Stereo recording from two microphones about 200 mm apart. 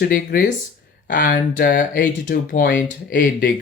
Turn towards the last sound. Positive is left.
turn(degrees=45)  # may be behind; listen again after turning